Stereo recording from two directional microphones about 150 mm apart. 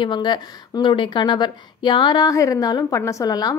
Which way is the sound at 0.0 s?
30° left (ahead or behind).